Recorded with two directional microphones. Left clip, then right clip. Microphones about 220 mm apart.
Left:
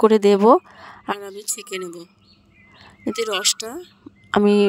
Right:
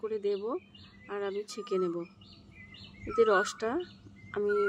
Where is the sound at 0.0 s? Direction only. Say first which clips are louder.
Left 19 dB; 50° left (ahead or behind).